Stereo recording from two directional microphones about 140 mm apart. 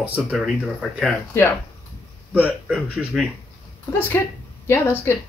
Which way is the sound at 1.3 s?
20° left (ahead or behind).